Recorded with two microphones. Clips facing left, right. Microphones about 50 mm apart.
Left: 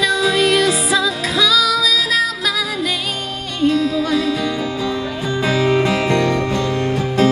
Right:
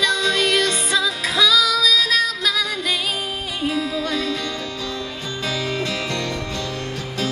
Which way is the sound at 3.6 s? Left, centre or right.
Centre.